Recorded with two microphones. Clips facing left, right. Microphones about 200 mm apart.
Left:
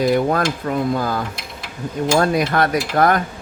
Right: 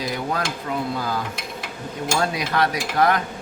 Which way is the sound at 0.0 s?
55° left (ahead or behind).